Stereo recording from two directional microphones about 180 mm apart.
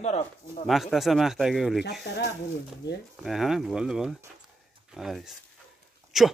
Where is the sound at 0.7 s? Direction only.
Centre (ahead or behind).